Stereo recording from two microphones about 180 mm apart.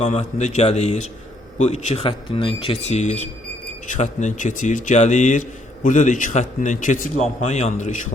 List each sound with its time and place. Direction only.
0.0 s a man's voice: 40° left (ahead or behind)